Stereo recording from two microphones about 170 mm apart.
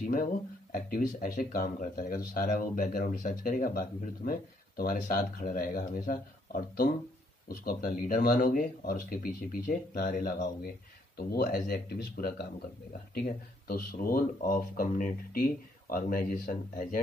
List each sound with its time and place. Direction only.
0.0 s speech: 55° left (ahead or behind)